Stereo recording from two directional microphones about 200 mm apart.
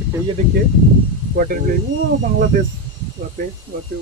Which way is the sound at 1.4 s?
45° right (ahead or behind).